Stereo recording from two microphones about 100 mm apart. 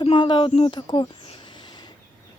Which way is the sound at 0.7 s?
50° left (ahead or behind).